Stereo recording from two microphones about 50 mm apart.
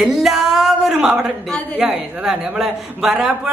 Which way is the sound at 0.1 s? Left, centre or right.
Centre.